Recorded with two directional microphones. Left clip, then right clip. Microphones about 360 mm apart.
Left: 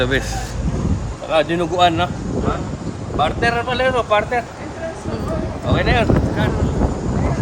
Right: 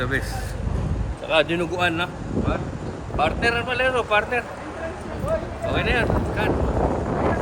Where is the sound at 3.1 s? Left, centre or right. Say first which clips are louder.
Left 4 dB; centre.